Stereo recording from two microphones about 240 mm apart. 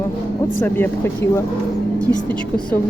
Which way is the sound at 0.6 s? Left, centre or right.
Centre.